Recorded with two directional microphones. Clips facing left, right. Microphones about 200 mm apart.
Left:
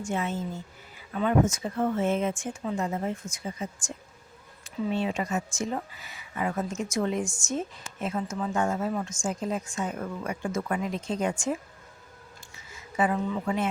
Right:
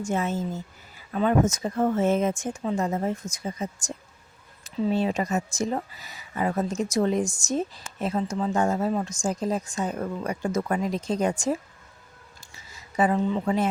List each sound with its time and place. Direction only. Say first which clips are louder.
0.0 s a woman's voice: right 3 dB; 40° right (ahead or behind)
12.7 s speech: right 3 dB; 35° right (ahead or behind)